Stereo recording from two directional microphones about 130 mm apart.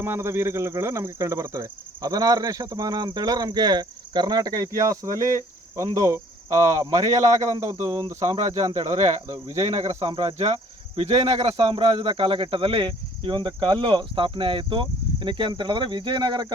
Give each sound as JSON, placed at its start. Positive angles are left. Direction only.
{"t": 0.0, "sound": "speech", "side_deg": -20}
{"t": 9.5, "sound": "speech", "side_deg": -55}